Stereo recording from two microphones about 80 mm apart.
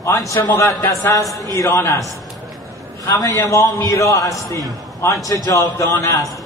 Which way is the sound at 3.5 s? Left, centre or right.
Left.